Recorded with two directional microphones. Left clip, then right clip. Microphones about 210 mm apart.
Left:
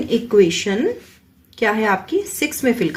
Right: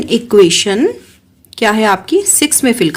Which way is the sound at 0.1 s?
50° right (ahead or behind).